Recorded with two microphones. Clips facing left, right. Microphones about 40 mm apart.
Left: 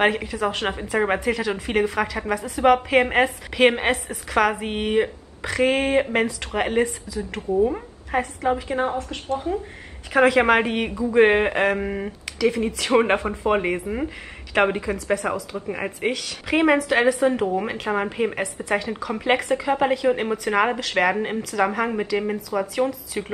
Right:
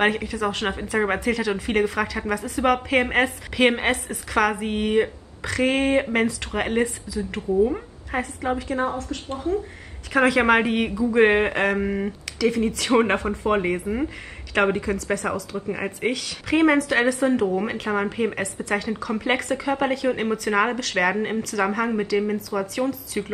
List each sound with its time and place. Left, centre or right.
0.0 s a woman's voice: centre
8.6 s a woman's voice: left
10.1 s a woman's voice: centre